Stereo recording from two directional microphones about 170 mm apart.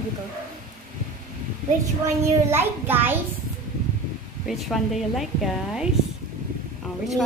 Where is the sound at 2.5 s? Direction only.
10° right (ahead or behind).